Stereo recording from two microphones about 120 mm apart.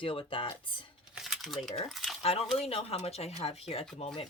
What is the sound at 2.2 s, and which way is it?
Speech, 55° left (ahead or behind).